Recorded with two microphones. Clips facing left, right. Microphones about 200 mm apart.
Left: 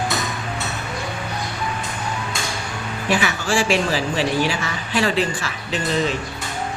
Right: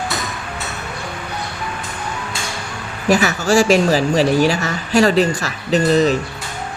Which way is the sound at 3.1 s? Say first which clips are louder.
Right 6 dB; 40° right (ahead or behind).